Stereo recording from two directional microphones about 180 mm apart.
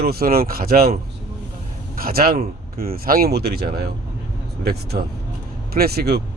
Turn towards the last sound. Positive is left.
turn(degrees=-60)  # may be behind; listen again after turning